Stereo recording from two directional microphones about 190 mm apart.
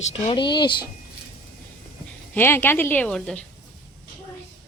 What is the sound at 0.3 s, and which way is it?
Speech, 25° left (ahead or behind).